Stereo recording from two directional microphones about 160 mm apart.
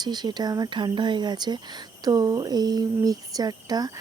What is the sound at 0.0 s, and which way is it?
Speech, 25° right (ahead or behind).